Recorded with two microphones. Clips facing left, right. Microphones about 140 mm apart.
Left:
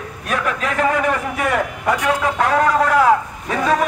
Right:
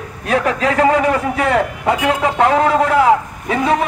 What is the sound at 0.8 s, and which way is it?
A man's voice, 30° right (ahead or behind).